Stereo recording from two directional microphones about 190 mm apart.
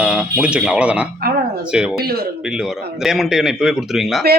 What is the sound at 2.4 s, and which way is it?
A man's voice, 5° right (ahead or behind).